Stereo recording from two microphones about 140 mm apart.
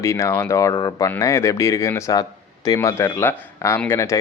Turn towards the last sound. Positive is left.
turn(degrees=20)  # may be behind; listen again after turning